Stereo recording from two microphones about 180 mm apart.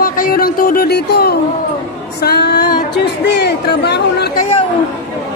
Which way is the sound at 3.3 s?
65° left (ahead or behind).